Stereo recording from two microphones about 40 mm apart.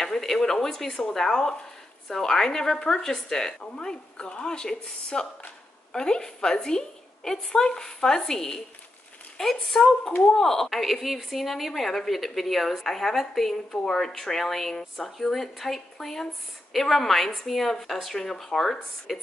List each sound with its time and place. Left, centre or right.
0.0 s a woman's voice: centre
10.7 s a woman's voice: centre